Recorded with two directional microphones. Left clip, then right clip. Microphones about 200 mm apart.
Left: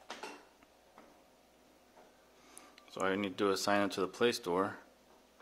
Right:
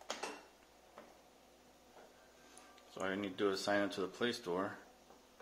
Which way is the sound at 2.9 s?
50° left (ahead or behind).